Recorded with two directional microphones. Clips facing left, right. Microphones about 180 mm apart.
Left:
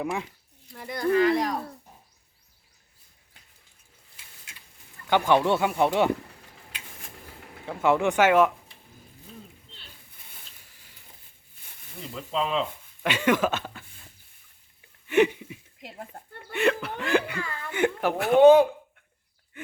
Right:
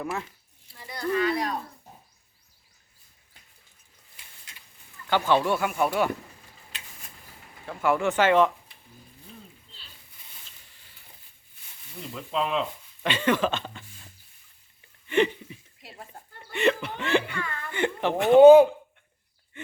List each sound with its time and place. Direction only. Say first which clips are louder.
0.0 s speech: left 2 dB; 15° left (ahead or behind)
0.7 s speech: left 4 dB; 55° left (ahead or behind)
5.0 s speech: left 2 dB; 15° left (ahead or behind)
7.7 s speech: left 2 dB; 20° left (ahead or behind)
12.1 s speech: even; centre (ahead or behind)
13.1 s speech: left 1 dB; 10° left (ahead or behind)
15.0 s a sound: left 2 dB; 10° left (ahead or behind)
16.1 s hiccup: left 2 dB; 55° left (ahead or behind)
16.6 s chuckle: even; centre (ahead or behind)
17.3 s speech: even; 30° left (ahead or behind)
17.7 s chuckle: left 1 dB; 5° left (ahead or behind)
18.3 s speech: right 3 dB; 30° right (ahead or behind)